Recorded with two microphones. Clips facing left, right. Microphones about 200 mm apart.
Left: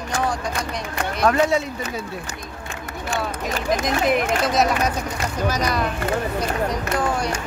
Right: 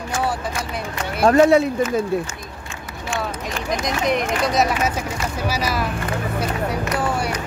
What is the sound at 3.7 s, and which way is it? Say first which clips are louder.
Speech: left 1 dB; centre (ahead or behind).